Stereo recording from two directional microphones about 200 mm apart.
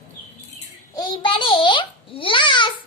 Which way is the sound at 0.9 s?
20° left (ahead or behind).